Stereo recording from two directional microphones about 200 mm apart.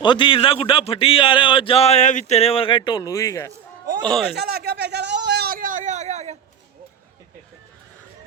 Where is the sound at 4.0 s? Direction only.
5° left (ahead or behind).